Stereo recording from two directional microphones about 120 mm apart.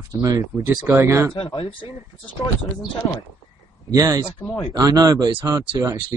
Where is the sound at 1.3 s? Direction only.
45° left (ahead or behind).